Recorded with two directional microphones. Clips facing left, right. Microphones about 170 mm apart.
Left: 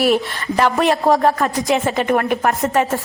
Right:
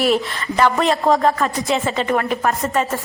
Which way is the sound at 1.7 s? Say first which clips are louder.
Left 4 dB; 15° left (ahead or behind).